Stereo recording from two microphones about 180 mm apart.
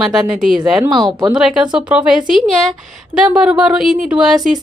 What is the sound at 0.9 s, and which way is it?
Speech, 25° right (ahead or behind).